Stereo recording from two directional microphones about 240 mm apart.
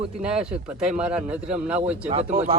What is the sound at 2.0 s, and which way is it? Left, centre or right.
Speech, right.